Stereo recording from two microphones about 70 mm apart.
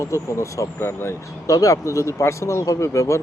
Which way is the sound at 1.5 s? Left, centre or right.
Left.